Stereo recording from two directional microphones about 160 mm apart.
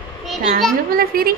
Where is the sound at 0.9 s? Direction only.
65° right (ahead or behind).